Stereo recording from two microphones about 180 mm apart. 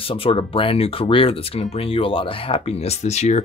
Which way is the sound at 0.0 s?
30° left (ahead or behind).